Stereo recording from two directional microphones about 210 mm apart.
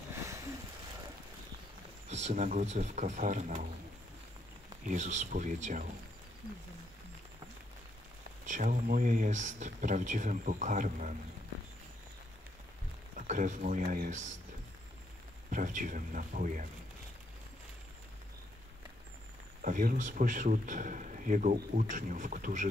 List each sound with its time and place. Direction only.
2.0 s speech: 30° right (ahead or behind)
4.8 s speech: 35° right (ahead or behind)
8.5 s speech: 40° right (ahead or behind)
13.3 s speech: 35° right (ahead or behind)
15.5 s speech: 40° right (ahead or behind)
19.6 s speech: 40° right (ahead or behind)